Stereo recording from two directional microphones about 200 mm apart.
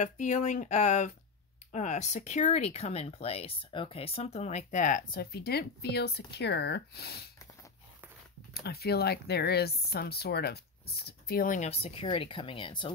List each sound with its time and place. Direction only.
0.0 s speech: 35° left (ahead or behind); by 7.2 s 50° left (ahead or behind)
8.5 s speech: 50° left (ahead or behind); by 12.9 s 25° left (ahead or behind)